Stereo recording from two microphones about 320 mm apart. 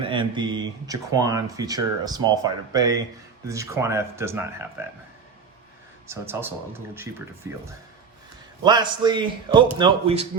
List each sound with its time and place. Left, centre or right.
0.0 s speech: centre
6.1 s speech: centre
8.6 s speech: centre